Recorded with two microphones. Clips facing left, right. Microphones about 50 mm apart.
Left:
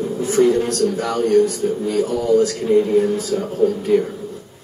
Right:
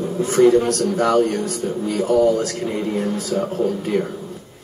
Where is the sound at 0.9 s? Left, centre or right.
Right.